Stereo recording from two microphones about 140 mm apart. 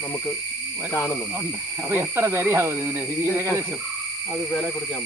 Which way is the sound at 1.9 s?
15° right (ahead or behind).